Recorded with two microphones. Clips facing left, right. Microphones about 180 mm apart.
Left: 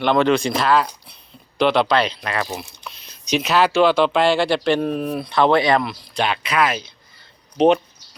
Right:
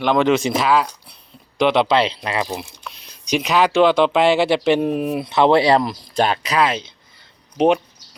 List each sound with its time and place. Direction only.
0.0 s speech: 15° right (ahead or behind)
0.4 s speech: 5° right (ahead or behind)
1.5 s speech: 15° right (ahead or behind)
4.4 s speech: 5° right (ahead or behind); by 6.9 s 25° right (ahead or behind)
7.5 s speech: 10° right (ahead or behind)